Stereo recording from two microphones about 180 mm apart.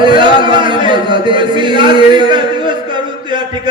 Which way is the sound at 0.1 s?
25° right (ahead or behind).